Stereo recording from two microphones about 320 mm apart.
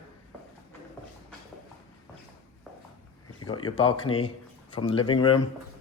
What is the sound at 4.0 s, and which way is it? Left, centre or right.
Speech, left.